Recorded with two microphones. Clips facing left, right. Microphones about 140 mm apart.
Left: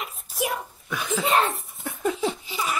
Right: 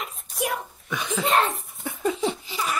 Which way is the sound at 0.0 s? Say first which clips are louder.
Even; centre (ahead or behind).